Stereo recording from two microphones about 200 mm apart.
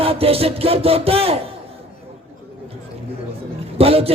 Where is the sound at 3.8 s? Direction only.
30° right (ahead or behind).